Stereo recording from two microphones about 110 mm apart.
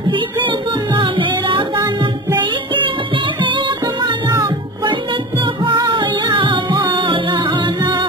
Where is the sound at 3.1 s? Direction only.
50° right (ahead or behind).